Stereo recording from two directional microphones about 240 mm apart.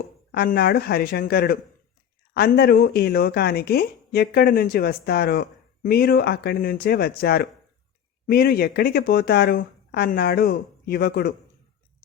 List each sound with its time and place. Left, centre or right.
0.3 s speech: left